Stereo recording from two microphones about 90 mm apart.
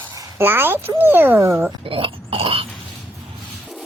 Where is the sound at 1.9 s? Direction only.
90° right.